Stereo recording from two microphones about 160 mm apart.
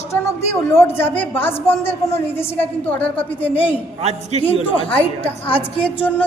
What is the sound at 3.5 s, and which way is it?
A woman's voice, 35° left (ahead or behind).